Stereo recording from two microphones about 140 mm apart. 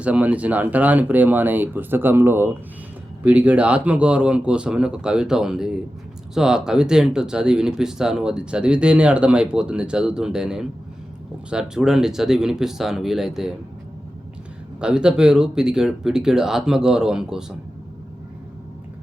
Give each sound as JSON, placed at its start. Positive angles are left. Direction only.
{"t": 0.0, "sound": "speech", "side_deg": -10}
{"t": 14.8, "sound": "speech", "side_deg": -5}